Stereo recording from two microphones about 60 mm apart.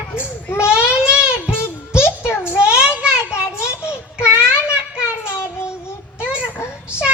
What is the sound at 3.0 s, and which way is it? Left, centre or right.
Child singing, centre.